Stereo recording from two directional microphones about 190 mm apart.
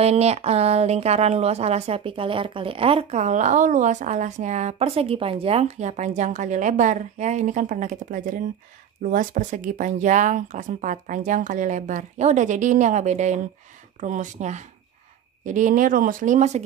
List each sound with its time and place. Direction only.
0.0 s a woman's voice: 35° right (ahead or behind)